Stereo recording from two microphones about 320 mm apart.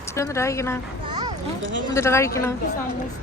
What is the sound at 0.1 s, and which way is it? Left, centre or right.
Speech, centre.